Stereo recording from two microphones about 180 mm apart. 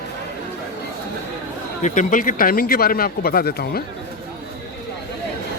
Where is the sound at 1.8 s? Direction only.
45° left (ahead or behind).